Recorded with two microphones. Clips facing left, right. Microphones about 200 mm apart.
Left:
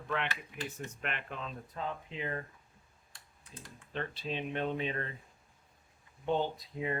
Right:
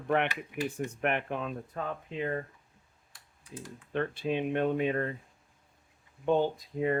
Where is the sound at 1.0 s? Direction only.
55° right (ahead or behind).